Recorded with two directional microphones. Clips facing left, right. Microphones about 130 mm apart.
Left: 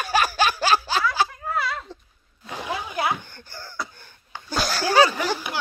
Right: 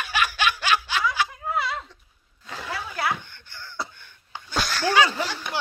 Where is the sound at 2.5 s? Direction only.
20° left (ahead or behind).